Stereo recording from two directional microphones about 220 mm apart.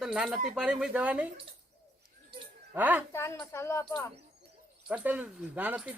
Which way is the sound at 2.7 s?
5° right (ahead or behind).